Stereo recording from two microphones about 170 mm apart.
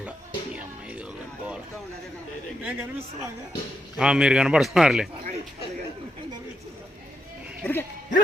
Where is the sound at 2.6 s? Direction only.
10° right (ahead or behind).